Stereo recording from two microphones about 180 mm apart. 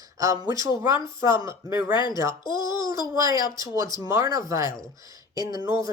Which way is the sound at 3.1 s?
20° right (ahead or behind).